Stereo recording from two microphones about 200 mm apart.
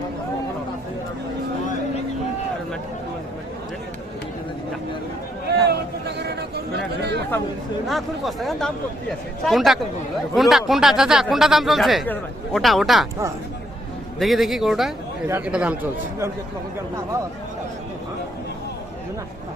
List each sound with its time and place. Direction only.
5.6 s a sound: 55° right (ahead or behind)
7.9 s speech: centre (ahead or behind)
14.2 s speech: centre (ahead or behind)